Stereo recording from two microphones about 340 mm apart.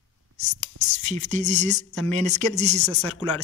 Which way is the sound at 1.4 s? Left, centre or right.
Centre.